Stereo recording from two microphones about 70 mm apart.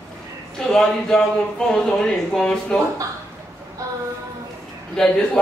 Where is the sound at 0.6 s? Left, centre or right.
Centre.